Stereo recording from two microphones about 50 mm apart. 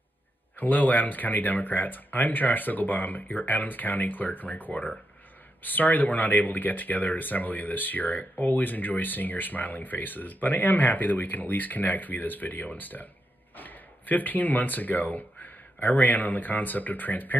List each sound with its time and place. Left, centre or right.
0.6 s speech: left